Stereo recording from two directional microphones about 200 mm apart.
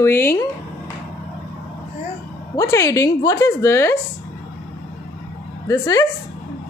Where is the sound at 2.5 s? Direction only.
15° left (ahead or behind).